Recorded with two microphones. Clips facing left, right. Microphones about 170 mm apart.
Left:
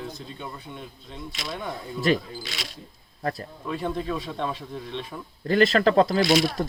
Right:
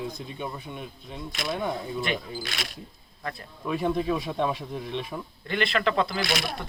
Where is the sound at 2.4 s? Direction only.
55° right (ahead or behind).